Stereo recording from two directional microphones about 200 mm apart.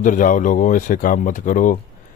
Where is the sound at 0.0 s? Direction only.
40° left (ahead or behind).